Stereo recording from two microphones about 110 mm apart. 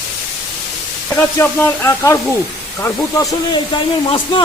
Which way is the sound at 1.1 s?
20° left (ahead or behind).